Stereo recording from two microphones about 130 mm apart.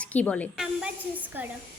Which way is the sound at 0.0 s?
10° left (ahead or behind).